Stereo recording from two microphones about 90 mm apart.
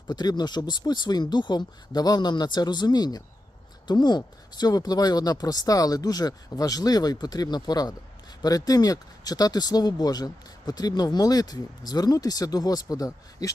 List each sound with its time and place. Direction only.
0.1 s speech: 50° left (ahead or behind)